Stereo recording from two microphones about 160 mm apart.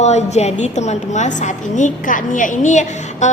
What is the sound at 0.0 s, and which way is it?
A woman's voice, 45° left (ahead or behind).